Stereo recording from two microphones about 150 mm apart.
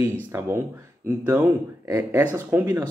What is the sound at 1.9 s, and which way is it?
Speech, 15° right (ahead or behind).